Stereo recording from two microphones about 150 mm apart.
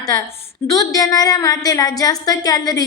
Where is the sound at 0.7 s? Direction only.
25° left (ahead or behind).